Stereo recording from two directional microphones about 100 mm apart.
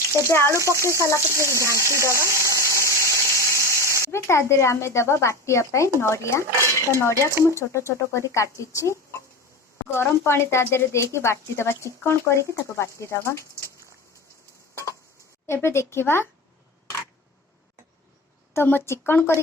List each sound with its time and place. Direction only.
0.3 s speech: 25° left (ahead or behind)
0.6 s speech: 30° right (ahead or behind)
2.1 s water: 30° right (ahead or behind)
4.1 s speech: 30° left (ahead or behind)
15.4 s speech: 25° left (ahead or behind)
18.5 s speech: 25° left (ahead or behind)